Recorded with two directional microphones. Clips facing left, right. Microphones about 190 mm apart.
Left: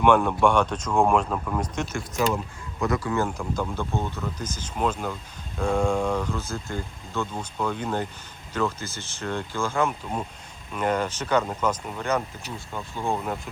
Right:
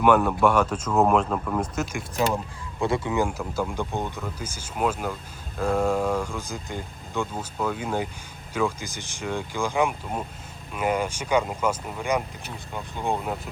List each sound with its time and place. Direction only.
0.0 s speech: 5° right (ahead or behind)
2.8 s speech: 25° right (ahead or behind)
3.1 s speech: 10° right (ahead or behind)